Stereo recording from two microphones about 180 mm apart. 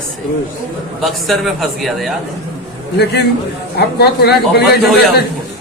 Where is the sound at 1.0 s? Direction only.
Centre (ahead or behind).